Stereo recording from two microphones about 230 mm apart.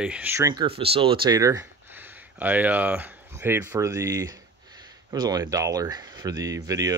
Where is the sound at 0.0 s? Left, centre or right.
Centre.